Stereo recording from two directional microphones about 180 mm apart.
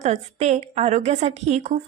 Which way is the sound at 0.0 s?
40° right (ahead or behind).